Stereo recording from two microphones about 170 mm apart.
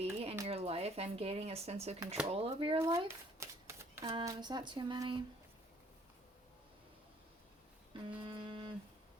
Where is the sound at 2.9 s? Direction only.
15° right (ahead or behind).